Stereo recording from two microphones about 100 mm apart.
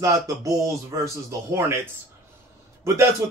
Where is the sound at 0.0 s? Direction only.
30° right (ahead or behind).